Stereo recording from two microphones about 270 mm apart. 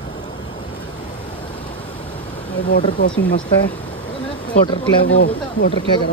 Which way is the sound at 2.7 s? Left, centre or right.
Left.